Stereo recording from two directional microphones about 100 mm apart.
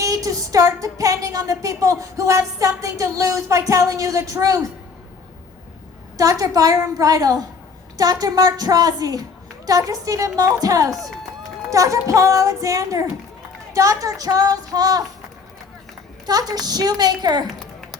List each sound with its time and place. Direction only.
0.0 s music: 35° right (ahead or behind)
6.4 s music: 35° right (ahead or behind)
16.2 s music: 40° right (ahead or behind)
17.4 s a sound: 5° left (ahead or behind)